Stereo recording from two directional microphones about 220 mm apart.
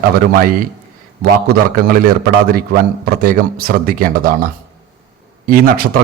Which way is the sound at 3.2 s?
40° right (ahead or behind).